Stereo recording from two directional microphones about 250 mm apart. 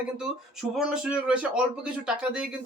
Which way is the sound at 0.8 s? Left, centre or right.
Centre.